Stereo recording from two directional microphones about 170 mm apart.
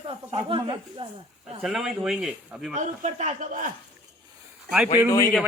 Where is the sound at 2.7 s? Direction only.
45° right (ahead or behind).